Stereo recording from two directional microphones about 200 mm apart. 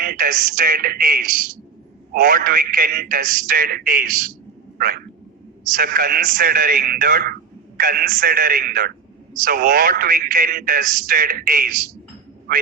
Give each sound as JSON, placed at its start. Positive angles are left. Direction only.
{"t": 0.0, "sound": "a man's voice", "side_deg": -45}
{"t": 4.8, "sound": "frog", "side_deg": -45}
{"t": 5.6, "sound": "a man's voice", "side_deg": -45}